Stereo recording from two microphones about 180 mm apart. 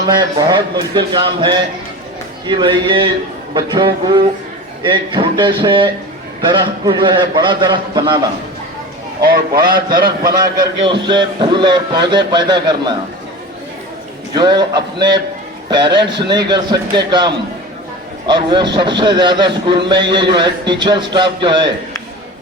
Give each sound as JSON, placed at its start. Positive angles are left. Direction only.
{"t": 0.1, "sound": "a man's voice", "side_deg": -20}
{"t": 9.2, "sound": "a man's voice", "side_deg": -55}
{"t": 10.8, "sound": "a man's voice", "side_deg": -25}
{"t": 14.3, "sound": "a man's voice", "side_deg": -25}